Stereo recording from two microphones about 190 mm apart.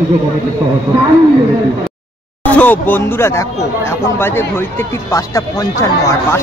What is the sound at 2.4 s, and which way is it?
Speech, 10° left (ahead or behind).